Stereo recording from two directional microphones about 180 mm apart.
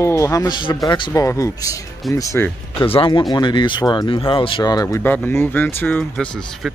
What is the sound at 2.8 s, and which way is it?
Speech, 30° left (ahead or behind).